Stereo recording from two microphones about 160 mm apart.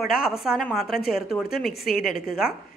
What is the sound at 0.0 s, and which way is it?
A woman's voice, 5° right (ahead or behind).